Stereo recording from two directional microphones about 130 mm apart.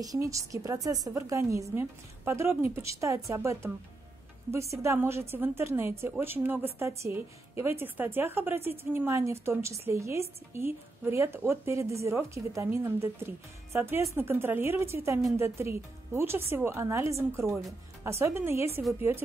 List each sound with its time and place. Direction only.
0.0 s a woman's voice: 25° right (ahead or behind)